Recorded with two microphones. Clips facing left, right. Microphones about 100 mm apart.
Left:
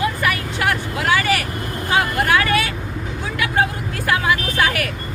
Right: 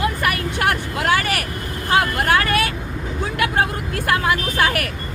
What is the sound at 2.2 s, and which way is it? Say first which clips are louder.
Vehicle: even; 50° right (ahead or behind).